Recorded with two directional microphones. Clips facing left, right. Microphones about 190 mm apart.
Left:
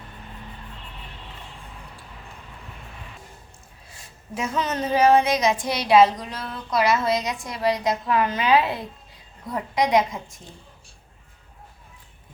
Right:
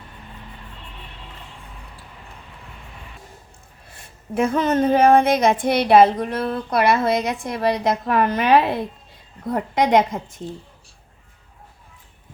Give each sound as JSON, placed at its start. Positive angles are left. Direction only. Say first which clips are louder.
{"t": 3.8, "sound": "a woman's voice", "louder": "right 6 dB", "side_deg": -60}